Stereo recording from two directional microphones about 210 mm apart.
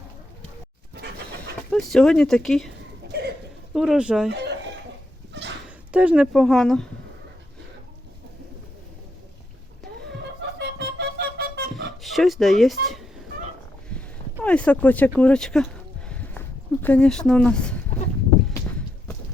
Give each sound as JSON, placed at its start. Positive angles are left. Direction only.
{"t": 1.7, "sound": "speech", "side_deg": 5}
{"t": 3.1, "sound": "a sound", "side_deg": -50}
{"t": 3.8, "sound": "speech", "side_deg": -5}
{"t": 4.3, "sound": "chicken", "side_deg": -55}
{"t": 5.6, "sound": "speech", "side_deg": -5}
{"t": 10.6, "sound": "music", "side_deg": -50}
{"t": 12.0, "sound": "speech", "side_deg": 0}
{"t": 14.4, "sound": "speech", "side_deg": 5}
{"t": 15.2, "sound": "a sound", "side_deg": 5}
{"t": 16.8, "sound": "speech", "side_deg": 5}